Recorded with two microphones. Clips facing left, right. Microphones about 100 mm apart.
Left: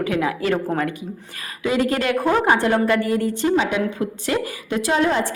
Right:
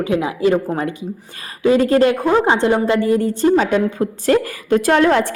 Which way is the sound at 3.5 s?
40° right (ahead or behind).